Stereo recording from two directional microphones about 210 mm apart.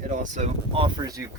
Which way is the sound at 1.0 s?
15° right (ahead or behind).